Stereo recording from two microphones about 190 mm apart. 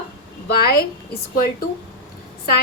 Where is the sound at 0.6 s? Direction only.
55° left (ahead or behind).